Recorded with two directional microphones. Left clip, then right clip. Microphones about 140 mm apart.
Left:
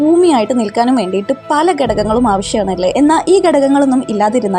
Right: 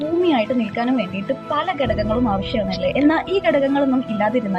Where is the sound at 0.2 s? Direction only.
40° left (ahead or behind).